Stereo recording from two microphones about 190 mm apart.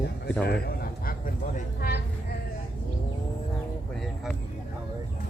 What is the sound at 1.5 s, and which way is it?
Speech, 50° left (ahead or behind).